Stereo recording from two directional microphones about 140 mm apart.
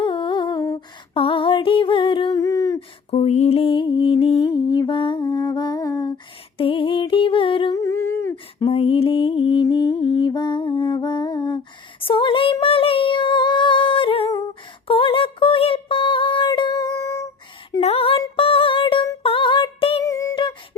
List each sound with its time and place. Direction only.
0.0 s humming: 35° left (ahead or behind)
2.4 s a sound: 25° left (ahead or behind)
3.1 s music: 50° left (ahead or behind); by 6.1 s 25° left (ahead or behind)
6.6 s music: 40° left (ahead or behind)
7.8 s humming: 20° left (ahead or behind)
8.7 s music: 45° left (ahead or behind)
9.9 s a sound: 40° left (ahead or behind)
14.8 s music: 40° left (ahead or behind); by 17.2 s 20° left (ahead or behind)
17.7 s a sound: 45° left (ahead or behind)
19.2 s female singing: 40° left (ahead or behind)
20.0 s a sound: 25° left (ahead or behind)
20.3 s beatboxing: 35° left (ahead or behind)